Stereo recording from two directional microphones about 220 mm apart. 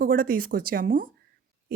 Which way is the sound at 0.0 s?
40° right (ahead or behind).